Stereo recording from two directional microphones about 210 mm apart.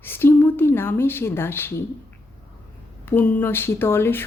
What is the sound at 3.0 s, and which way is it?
Speech, 10° left (ahead or behind).